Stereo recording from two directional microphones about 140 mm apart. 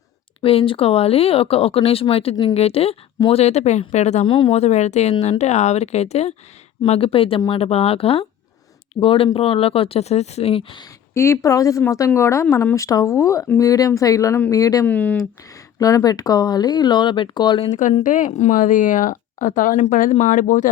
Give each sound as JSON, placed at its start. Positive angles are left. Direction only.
{"t": 0.4, "sound": "speech", "side_deg": 40}
{"t": 2.3, "sound": "speech", "side_deg": 30}
{"t": 2.6, "sound": "speech", "side_deg": 45}
{"t": 4.3, "sound": "speech", "side_deg": 35}
{"t": 4.5, "sound": "speech", "side_deg": 55}
{"t": 11.1, "sound": "speech", "side_deg": 20}
{"t": 14.8, "sound": "speech", "side_deg": 10}
{"t": 15.8, "sound": "speech", "side_deg": 25}
{"t": 17.7, "sound": "speech", "side_deg": 60}